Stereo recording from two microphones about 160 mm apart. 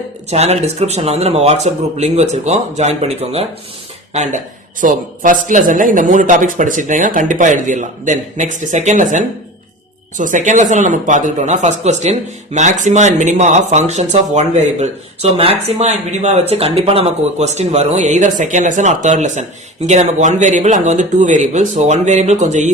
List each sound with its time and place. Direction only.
0.3 s speech: 40° right (ahead or behind)
10.2 s speech: 55° right (ahead or behind)